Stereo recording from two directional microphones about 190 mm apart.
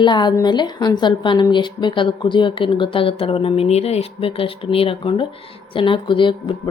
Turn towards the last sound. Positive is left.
turn(degrees=25)  # may be behind; listen again after turning